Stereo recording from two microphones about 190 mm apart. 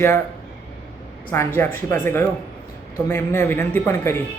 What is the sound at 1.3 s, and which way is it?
Speech, 10° left (ahead or behind).